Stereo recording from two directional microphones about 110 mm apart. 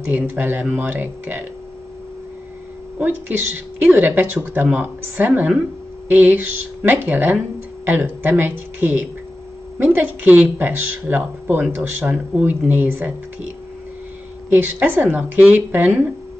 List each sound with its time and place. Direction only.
0.1 s speech: 15° right (ahead or behind)
3.0 s speech: 15° right (ahead or behind)
14.5 s speech: 20° right (ahead or behind)